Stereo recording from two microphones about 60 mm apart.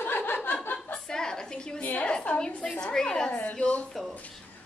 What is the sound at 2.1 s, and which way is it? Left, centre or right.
A woman's voice, centre.